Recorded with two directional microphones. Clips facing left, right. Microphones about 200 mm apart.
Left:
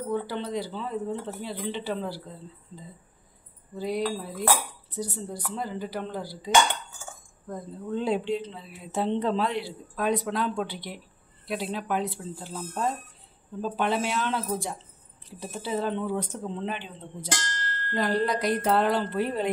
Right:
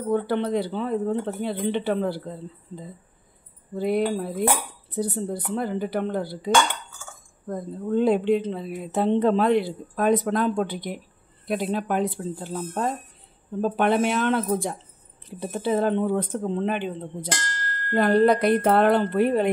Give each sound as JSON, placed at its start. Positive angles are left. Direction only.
{"t": 0.1, "sound": "speech", "side_deg": -60}